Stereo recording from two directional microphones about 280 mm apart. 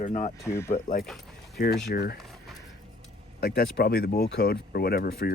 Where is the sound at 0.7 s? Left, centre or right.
Left.